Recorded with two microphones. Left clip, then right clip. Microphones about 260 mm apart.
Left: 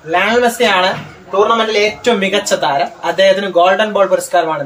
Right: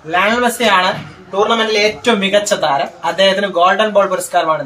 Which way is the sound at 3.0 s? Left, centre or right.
Centre.